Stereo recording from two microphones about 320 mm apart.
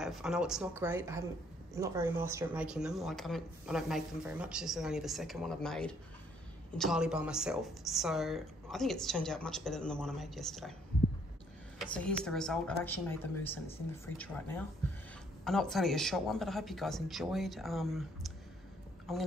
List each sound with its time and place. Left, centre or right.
0.0 s speech: centre
11.8 s speech: centre